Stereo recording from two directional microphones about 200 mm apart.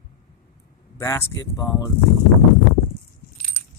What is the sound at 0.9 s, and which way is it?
Speech, 15° left (ahead or behind).